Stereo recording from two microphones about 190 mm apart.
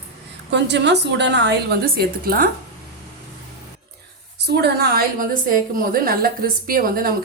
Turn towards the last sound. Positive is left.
turn(degrees=-50)  # may be behind; listen again after turning